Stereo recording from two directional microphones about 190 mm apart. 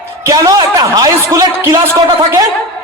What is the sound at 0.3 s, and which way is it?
A man's voice, 20° right (ahead or behind).